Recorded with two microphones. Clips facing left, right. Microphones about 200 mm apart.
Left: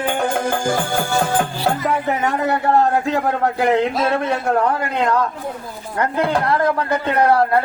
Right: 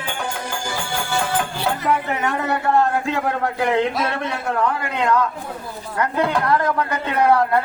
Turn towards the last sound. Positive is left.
turn(degrees=35)  # may be behind; listen again after turning